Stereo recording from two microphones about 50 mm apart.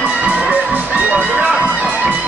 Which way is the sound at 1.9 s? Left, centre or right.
Right.